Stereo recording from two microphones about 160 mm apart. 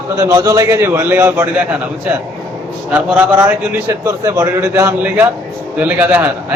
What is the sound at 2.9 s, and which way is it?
A man's voice, 10° right (ahead or behind).